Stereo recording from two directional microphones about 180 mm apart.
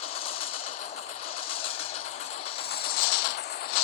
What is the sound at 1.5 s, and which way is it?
Train, 30° left (ahead or behind).